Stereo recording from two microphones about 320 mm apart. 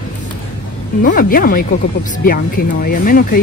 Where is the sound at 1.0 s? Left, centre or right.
Left.